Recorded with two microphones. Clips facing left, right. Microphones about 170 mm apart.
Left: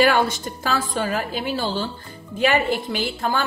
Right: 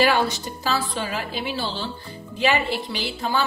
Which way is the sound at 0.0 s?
50° left (ahead or behind).